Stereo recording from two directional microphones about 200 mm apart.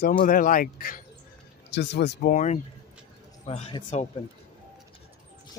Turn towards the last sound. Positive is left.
turn(degrees=35)  # may be behind; listen again after turning